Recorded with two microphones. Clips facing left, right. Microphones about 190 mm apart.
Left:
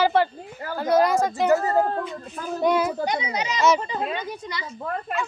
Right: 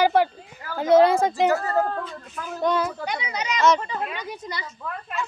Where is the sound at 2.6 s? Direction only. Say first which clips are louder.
Left 2 dB; 10° left (ahead or behind).